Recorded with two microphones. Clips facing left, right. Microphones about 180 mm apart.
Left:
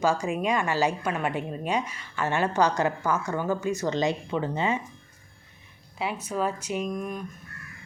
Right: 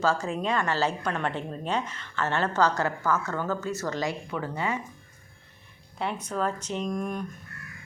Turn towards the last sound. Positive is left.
turn(degrees=0)  # may be behind; listen again after turning